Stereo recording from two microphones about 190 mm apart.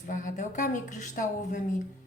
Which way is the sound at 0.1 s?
45° left (ahead or behind).